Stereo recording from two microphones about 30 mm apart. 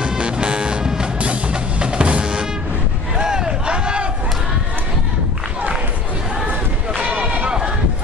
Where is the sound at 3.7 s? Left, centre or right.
Right.